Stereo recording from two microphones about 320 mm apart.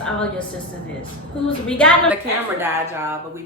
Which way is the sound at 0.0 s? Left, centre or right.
Centre.